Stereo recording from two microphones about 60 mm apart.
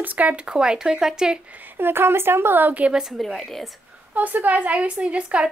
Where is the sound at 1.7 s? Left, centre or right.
Right.